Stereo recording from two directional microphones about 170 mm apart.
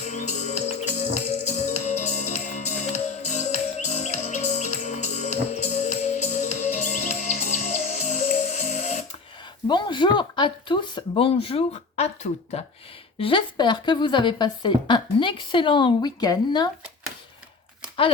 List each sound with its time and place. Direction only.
0.1 s music: 45° left (ahead or behind)
9.6 s a woman's voice: 25° left (ahead or behind)